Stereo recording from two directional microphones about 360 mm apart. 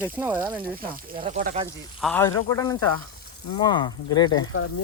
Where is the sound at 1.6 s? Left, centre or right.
Centre.